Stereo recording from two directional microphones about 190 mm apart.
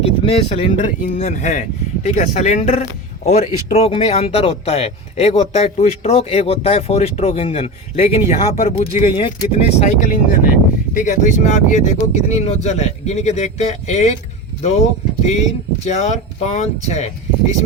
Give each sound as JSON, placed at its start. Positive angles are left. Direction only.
{"t": 0.0, "sound": "speech", "side_deg": 30}
{"t": 15.2, "sound": "speech", "side_deg": 35}